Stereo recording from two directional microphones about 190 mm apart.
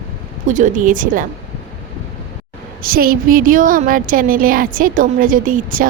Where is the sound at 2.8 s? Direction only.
50° right (ahead or behind).